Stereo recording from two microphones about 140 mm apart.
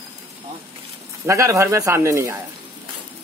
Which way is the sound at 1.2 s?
20° right (ahead or behind).